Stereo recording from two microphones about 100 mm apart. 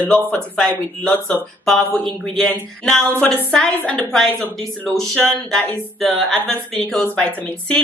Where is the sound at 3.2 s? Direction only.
15° left (ahead or behind).